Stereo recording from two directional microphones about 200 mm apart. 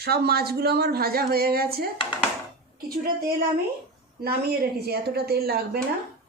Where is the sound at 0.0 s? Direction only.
50° right (ahead or behind).